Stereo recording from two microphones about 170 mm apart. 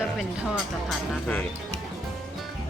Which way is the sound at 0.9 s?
5° left (ahead or behind).